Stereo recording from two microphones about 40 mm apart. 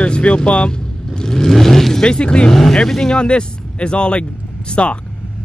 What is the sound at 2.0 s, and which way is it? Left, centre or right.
Speech, left.